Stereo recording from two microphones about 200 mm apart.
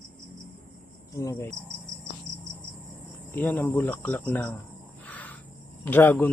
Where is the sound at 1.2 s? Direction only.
15° left (ahead or behind).